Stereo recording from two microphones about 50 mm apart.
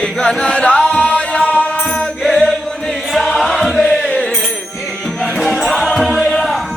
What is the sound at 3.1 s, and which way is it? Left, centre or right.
Chant, centre.